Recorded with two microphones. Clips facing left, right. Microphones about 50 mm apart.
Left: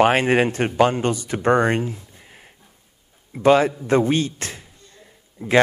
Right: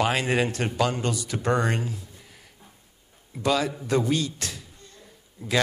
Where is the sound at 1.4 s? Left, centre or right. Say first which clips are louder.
Left 7 dB; left.